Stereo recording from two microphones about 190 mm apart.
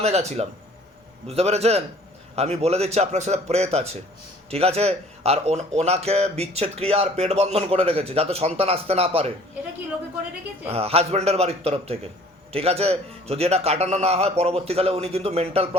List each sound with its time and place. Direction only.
0.0 s speech: 35° right (ahead or behind)
10.7 s speech: 30° right (ahead or behind)